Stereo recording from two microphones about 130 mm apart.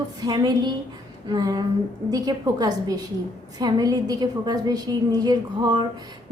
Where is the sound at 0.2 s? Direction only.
35° right (ahead or behind).